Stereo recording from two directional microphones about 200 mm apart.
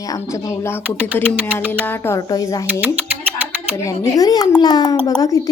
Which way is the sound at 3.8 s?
15° left (ahead or behind).